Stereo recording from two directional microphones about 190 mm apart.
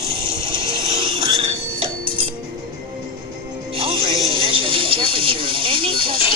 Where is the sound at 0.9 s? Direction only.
30° right (ahead or behind).